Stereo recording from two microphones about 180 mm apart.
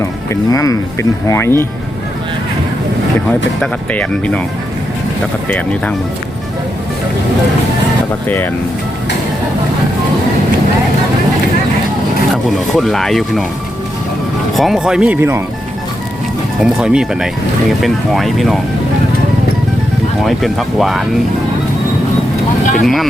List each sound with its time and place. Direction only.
0.0 s speech: 15° left (ahead or behind)
3.6 s speech: 5° left (ahead or behind)
5.5 s speech: 10° left (ahead or behind)
12.3 s speech: centre (ahead or behind)
14.5 s speech: centre (ahead or behind)
16.6 s speech: 5° right (ahead or behind)
20.2 s speech: centre (ahead or behind)
22.8 s speech: centre (ahead or behind)